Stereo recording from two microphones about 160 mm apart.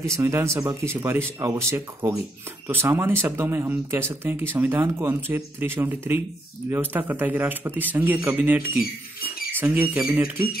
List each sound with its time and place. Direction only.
0.0 s speech: 20° right (ahead or behind)
9.2 s rodents: 10° right (ahead or behind)
9.9 s speech: 5° right (ahead or behind)